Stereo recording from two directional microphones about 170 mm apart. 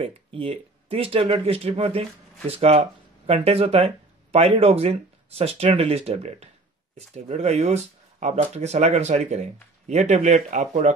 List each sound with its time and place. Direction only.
0.0 s speech: 35° right (ahead or behind)